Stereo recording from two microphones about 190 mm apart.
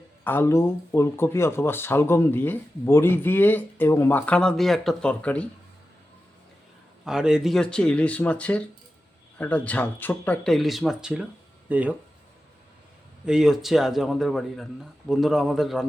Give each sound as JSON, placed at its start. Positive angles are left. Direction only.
{"t": 0.3, "sound": "speech", "side_deg": 15}
{"t": 7.0, "sound": "a man's voice", "side_deg": -5}
{"t": 13.2, "sound": "a man's voice", "side_deg": -5}